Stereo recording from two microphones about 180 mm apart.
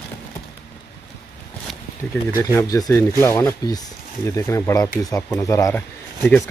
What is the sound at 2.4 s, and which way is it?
Speech, 15° left (ahead or behind).